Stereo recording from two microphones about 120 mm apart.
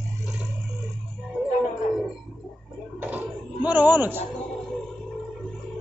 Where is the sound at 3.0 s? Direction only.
10° right (ahead or behind).